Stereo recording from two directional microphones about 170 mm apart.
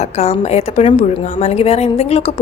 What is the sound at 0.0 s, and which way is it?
A woman's voice, 40° left (ahead or behind).